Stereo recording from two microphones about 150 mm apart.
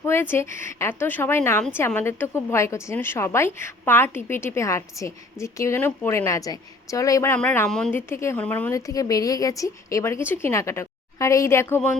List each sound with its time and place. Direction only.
0.0 s a woman's voice: 15° left (ahead or behind)
8.7 s a woman's voice: 20° left (ahead or behind)